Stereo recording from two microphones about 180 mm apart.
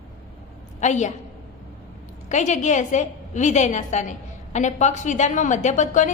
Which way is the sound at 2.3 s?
40° left (ahead or behind).